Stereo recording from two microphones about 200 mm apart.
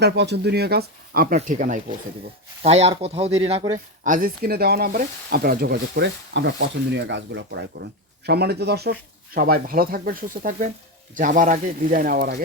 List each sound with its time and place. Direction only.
0.0 s speech: 55° right (ahead or behind); by 3.6 s 30° right (ahead or behind)
4.0 s speech: 45° right (ahead or behind)